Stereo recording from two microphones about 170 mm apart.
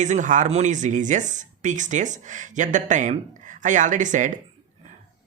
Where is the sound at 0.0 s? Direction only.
45° right (ahead or behind).